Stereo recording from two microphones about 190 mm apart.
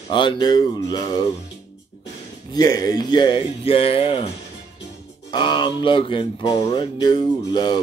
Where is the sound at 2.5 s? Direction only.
20° left (ahead or behind).